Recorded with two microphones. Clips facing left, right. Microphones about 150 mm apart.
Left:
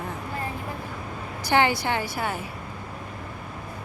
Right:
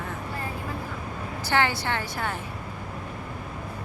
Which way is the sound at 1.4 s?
15° left (ahead or behind).